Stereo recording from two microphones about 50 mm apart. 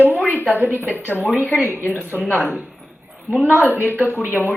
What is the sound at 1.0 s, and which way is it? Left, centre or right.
Speech, left.